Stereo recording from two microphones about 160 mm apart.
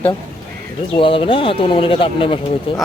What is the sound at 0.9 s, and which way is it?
Speech, 35° left (ahead or behind).